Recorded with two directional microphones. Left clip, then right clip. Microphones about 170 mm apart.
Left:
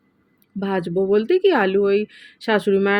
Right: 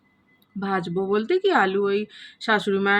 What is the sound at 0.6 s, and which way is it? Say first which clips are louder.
Speech: left 4 dB; 20° left (ahead or behind).